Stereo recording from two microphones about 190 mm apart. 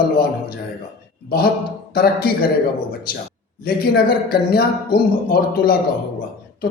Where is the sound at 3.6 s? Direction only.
55° left (ahead or behind).